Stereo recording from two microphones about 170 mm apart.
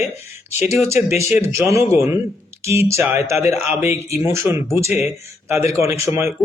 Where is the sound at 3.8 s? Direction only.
40° left (ahead or behind).